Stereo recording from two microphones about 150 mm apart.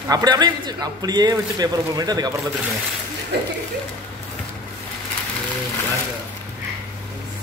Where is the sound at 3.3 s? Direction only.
90° right.